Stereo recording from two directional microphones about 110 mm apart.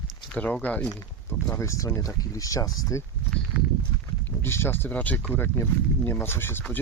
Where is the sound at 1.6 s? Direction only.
30° left (ahead or behind).